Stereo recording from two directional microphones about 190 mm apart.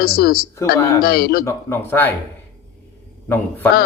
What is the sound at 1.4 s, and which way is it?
Speech, 15° left (ahead or behind).